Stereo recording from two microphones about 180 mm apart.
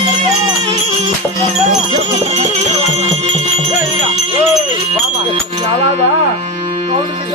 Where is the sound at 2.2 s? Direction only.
35° right (ahead or behind).